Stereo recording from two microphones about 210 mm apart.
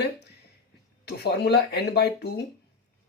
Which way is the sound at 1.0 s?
50° left (ahead or behind).